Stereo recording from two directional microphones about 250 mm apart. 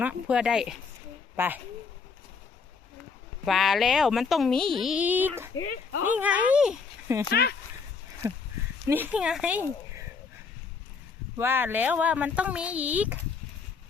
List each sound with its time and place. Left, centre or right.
0.0 s a woman's voice: centre
3.4 s speech: centre
5.5 s speech: left
6.1 s speech: centre
7.3 s speech: left
8.2 s a woman's voice: centre
11.3 s speech: centre